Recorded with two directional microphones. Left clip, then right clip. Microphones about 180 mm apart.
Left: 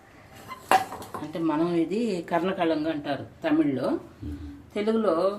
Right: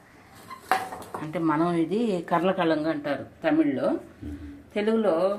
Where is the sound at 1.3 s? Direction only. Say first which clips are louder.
Right 1 dB; 15° right (ahead or behind).